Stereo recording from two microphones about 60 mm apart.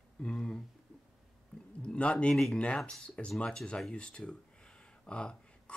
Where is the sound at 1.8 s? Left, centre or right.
Left.